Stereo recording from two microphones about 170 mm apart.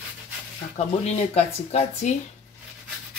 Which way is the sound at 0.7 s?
40° left (ahead or behind).